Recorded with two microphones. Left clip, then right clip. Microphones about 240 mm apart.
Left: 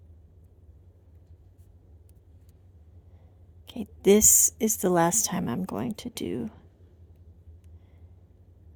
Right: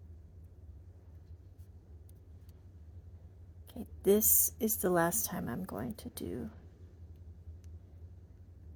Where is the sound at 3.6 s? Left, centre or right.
Left.